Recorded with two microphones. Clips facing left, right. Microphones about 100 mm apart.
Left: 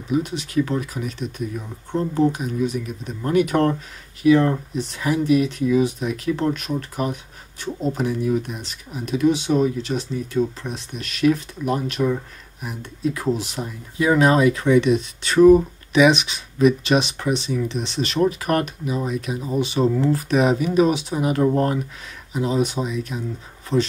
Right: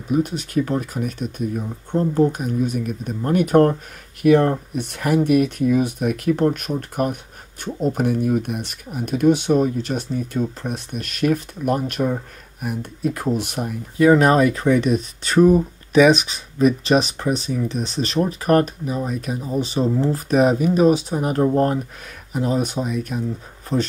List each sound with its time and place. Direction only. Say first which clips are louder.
0.1 s speech: right 2 dB; 45° right (ahead or behind)
4.2 s speech: right 1 dB; 55° right (ahead or behind)